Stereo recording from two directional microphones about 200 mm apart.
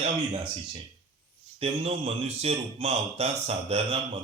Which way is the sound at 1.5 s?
30° right (ahead or behind).